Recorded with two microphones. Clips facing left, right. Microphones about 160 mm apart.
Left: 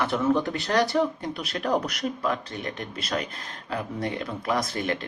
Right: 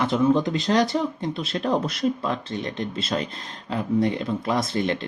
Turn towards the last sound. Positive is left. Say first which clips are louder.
# right 4 dB
turn(degrees=-25)  # may be behind; listen again after turning